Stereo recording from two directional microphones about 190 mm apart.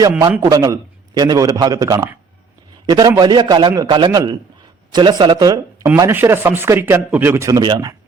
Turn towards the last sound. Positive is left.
turn(degrees=-20)  # may be behind; listen again after turning